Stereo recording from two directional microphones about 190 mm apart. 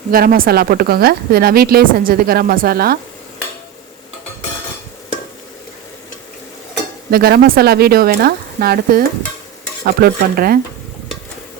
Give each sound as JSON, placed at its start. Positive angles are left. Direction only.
{"t": 0.1, "sound": "a woman's voice", "side_deg": -50}
{"t": 7.1, "sound": "a woman's voice", "side_deg": -55}